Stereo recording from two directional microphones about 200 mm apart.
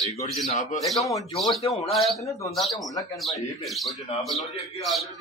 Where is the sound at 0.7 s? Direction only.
Centre (ahead or behind).